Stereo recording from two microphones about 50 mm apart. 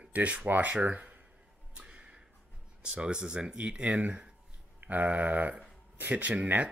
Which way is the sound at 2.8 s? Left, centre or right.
Right.